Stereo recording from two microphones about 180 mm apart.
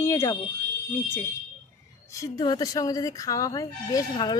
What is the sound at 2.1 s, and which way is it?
Speech, 20° left (ahead or behind).